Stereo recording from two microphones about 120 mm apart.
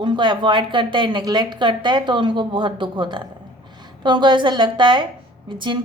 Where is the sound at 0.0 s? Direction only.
40° right (ahead or behind).